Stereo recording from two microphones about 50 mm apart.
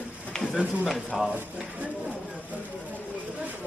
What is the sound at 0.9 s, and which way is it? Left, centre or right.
Speech, centre.